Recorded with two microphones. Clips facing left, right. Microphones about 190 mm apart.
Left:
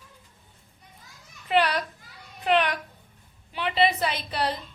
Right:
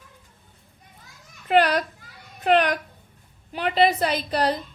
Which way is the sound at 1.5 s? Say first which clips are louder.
Right 4 dB; 45° right (ahead or behind).